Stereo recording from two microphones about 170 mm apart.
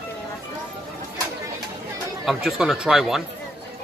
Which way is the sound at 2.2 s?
Centre (ahead or behind).